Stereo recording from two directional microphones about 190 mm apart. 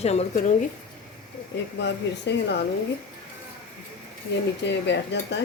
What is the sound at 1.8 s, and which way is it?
Speech, 65° left (ahead or behind).